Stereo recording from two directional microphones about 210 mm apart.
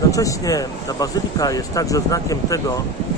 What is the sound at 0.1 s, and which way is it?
Speech, 15° left (ahead or behind).